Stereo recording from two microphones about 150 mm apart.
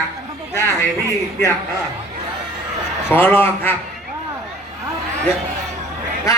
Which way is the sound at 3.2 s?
15° left (ahead or behind).